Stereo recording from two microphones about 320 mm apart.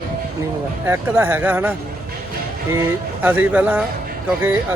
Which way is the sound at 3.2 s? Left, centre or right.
Centre.